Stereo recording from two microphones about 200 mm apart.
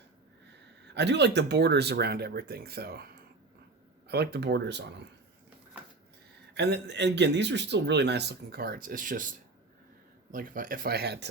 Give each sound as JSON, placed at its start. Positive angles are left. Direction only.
{"t": 0.9, "sound": "speech", "side_deg": -60}
{"t": 4.1, "sound": "speech", "side_deg": -55}
{"t": 6.5, "sound": "speech", "side_deg": -60}
{"t": 10.3, "sound": "speech", "side_deg": -45}